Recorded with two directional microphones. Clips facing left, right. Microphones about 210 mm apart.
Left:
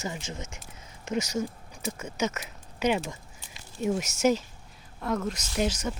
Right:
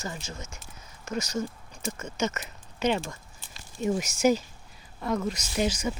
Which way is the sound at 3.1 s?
15° left (ahead or behind).